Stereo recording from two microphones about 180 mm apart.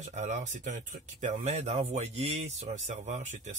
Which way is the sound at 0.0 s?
40° right (ahead or behind).